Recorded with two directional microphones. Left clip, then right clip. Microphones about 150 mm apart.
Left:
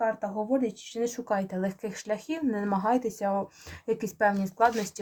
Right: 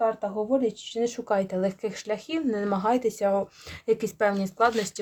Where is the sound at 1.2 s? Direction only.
40° right (ahead or behind).